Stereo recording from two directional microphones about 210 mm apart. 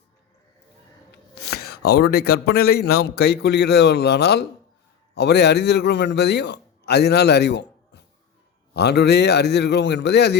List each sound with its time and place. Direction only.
1.1 s a man's voice: 50° left (ahead or behind)